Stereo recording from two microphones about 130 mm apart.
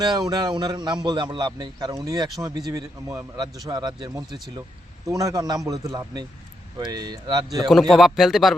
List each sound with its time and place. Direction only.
0.0 s a man's voice: 35° right (ahead or behind)
6.7 s a man's voice: 30° right (ahead or behind)
7.7 s a man's voice: centre (ahead or behind)